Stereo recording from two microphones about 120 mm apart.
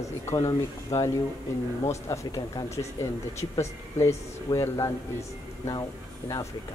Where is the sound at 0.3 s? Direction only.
25° left (ahead or behind).